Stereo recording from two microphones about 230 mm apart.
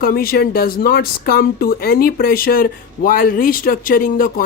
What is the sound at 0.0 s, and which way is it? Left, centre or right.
Speech, left.